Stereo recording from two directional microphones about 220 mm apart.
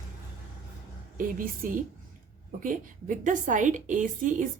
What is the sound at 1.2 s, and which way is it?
Speech, 40° right (ahead or behind).